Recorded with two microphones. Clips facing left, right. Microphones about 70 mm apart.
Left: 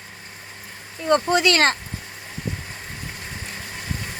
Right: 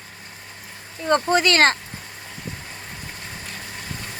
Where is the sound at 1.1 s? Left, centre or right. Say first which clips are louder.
Even; right.